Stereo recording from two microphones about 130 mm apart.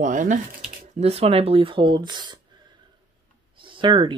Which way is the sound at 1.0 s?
50° right (ahead or behind).